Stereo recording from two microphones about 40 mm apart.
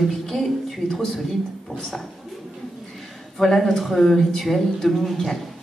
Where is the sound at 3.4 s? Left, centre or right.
Centre.